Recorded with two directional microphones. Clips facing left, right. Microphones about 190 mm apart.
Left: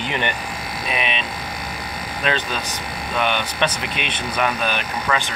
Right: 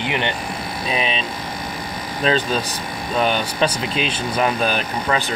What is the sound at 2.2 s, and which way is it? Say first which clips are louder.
Speech: right 5 dB; 35° right (ahead or behind).